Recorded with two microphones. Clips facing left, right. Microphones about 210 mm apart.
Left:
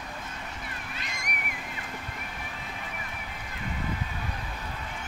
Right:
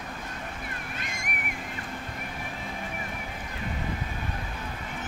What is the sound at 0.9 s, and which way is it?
Boat, 50° right (ahead or behind).